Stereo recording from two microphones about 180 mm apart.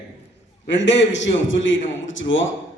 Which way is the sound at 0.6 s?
85° left.